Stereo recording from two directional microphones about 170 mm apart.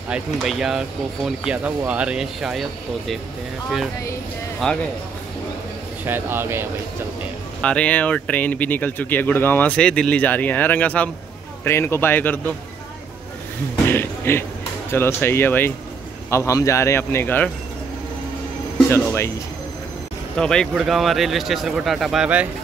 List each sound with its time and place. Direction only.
0.1 s speech: centre (ahead or behind)
4.6 s speech: 5° left (ahead or behind)
6.0 s speech: 15° right (ahead or behind)
7.6 s speech: 5° left (ahead or behind)
13.8 s speech: 15° left (ahead or behind)
18.9 s speech: 15° left (ahead or behind)
20.3 s speech: 5° left (ahead or behind)